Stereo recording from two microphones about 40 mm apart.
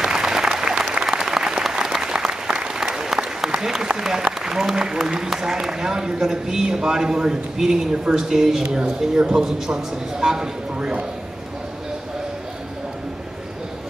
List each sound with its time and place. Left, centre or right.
0.0 s applause: centre
4.4 s a man's voice: centre